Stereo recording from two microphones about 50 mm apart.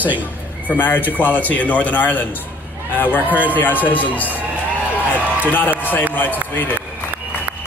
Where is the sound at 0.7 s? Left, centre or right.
Left.